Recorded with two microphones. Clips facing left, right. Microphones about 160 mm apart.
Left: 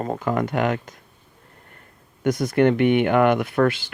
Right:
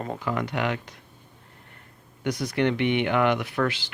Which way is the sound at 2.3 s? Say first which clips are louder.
Left 6 dB; 50° left (ahead or behind).